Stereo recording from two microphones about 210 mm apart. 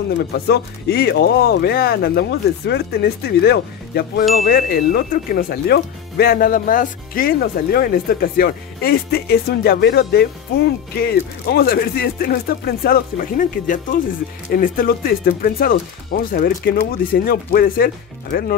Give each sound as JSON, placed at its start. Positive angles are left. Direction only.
{"t": 0.2, "sound": "speech", "side_deg": 50}